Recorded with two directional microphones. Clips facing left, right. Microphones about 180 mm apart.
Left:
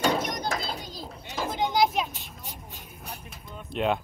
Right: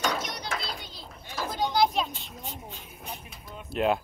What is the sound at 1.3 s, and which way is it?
Children playing, 15° left (ahead or behind).